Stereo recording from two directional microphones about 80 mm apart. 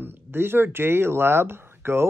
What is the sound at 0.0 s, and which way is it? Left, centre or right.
Speech, right.